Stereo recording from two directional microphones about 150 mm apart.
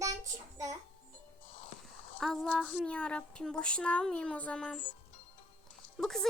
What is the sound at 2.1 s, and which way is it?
Speech, 5° left (ahead or behind).